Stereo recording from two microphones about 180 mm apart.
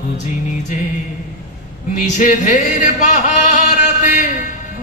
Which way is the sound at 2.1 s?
45° left (ahead or behind).